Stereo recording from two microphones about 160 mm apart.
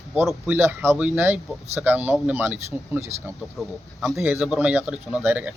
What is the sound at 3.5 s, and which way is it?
Speech, centre (ahead or behind).